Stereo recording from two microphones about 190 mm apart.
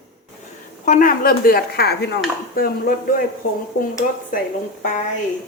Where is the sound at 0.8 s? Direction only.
45° left (ahead or behind).